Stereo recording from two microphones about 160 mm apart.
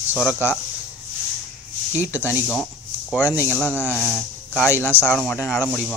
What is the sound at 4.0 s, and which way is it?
Speech, 5° right (ahead or behind).